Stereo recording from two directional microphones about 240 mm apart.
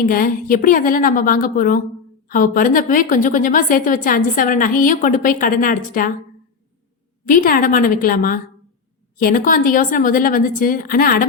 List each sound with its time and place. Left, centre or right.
0.0 s a woman's voice: left
7.3 s a woman's voice: left